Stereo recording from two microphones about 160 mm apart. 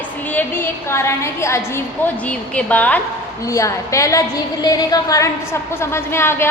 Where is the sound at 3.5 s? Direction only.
20° left (ahead or behind).